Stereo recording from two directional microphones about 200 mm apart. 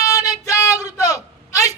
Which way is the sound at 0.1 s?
15° left (ahead or behind).